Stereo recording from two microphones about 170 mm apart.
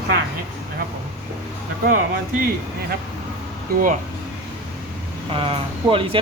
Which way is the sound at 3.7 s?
65° right (ahead or behind).